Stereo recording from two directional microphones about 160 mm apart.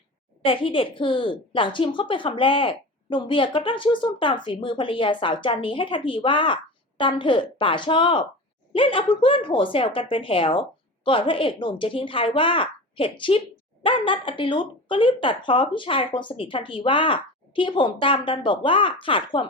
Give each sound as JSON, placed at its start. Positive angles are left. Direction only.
{"t": 0.4, "sound": "a woman's voice", "side_deg": 35}